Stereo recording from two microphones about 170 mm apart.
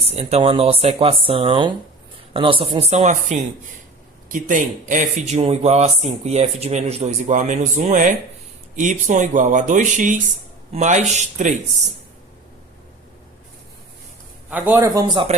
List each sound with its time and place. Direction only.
0.0 s speech: 35° right (ahead or behind)
2.9 s speech: 45° right (ahead or behind)
14.5 s a man's voice: 10° right (ahead or behind)
15.0 s speech: 25° right (ahead or behind)